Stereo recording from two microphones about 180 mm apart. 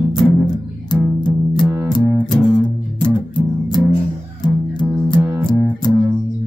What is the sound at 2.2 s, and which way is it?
Music, 25° left (ahead or behind).